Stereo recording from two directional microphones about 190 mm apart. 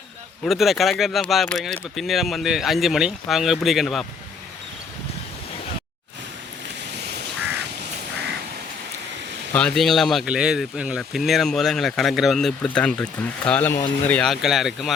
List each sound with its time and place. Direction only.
0.4 s speech: centre (ahead or behind)
6.9 s crow: 60° right (ahead or behind)
9.5 s speech: 5° left (ahead or behind)